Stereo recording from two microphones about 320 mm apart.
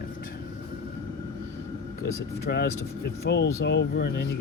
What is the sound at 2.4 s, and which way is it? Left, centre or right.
Speech, left.